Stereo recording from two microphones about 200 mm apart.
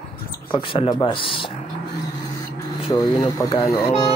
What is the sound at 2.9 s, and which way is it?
Speech, 15° left (ahead or behind).